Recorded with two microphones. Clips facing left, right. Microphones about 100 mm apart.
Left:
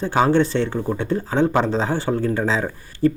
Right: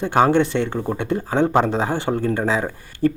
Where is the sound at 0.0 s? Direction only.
60° right (ahead or behind).